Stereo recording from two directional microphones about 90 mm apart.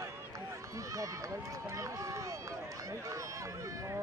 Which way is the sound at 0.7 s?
35° right (ahead or behind).